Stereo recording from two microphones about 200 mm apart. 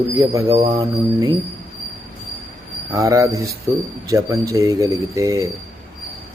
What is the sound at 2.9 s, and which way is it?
Speech, 15° right (ahead or behind).